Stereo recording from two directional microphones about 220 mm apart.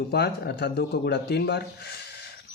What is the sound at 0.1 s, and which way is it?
Speech, 45° left (ahead or behind).